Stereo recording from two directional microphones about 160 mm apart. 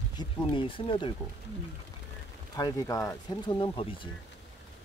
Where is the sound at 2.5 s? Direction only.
20° left (ahead or behind).